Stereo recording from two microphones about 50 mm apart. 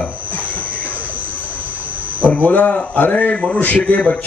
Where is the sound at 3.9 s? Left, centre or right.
Left.